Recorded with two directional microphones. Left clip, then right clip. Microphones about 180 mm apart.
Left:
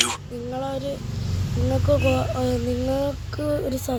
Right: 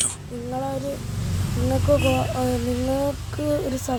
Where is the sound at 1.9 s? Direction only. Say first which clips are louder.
Even; centre (ahead or behind).